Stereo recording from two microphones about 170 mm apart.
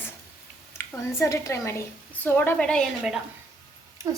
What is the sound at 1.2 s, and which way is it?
A woman's voice, 20° left (ahead or behind).